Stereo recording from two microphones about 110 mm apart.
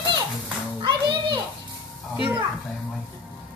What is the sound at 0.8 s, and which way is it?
Children playing, 45° right (ahead or behind).